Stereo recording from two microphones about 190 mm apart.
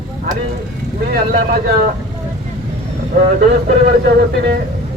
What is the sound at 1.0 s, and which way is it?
Speech, 50° right (ahead or behind).